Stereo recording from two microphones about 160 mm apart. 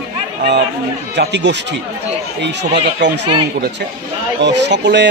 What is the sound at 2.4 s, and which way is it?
Speech, 90° right.